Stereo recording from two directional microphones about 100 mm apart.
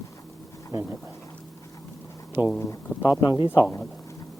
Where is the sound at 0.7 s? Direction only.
25° right (ahead or behind).